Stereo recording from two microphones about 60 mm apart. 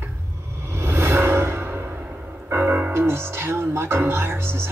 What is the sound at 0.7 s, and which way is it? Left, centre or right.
Music, right.